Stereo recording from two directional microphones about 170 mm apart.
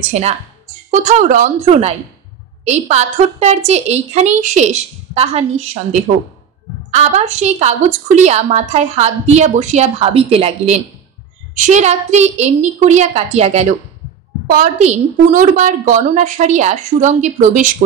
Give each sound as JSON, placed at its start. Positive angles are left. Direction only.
{"t": 0.1, "sound": "a woman's voice", "side_deg": -40}